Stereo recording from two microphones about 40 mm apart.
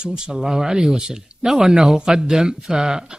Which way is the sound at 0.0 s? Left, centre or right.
Centre.